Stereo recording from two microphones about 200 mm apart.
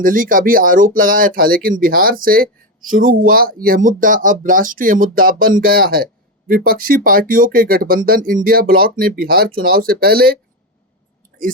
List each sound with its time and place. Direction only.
0.0 s speech: 45° right (ahead or behind)